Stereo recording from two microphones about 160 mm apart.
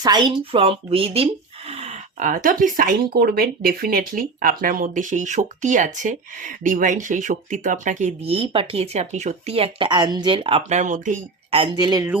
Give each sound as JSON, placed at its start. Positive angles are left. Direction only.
{"t": 0.0, "sound": "speech", "side_deg": -25}
{"t": 11.5, "sound": "speech", "side_deg": -30}